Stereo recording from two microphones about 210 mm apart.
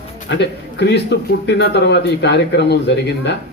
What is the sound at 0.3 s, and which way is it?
A man's voice, 55° left (ahead or behind).